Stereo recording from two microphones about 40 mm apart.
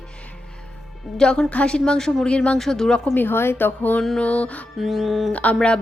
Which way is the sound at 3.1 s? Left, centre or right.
Left.